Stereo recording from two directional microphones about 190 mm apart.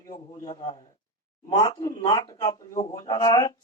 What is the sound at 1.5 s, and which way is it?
Speech, 15° left (ahead or behind).